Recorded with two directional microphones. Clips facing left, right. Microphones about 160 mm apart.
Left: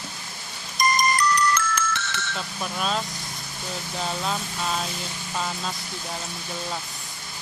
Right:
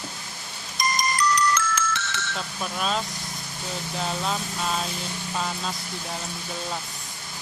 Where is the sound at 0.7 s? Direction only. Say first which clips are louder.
Left 3 dB; 55° left (ahead or behind).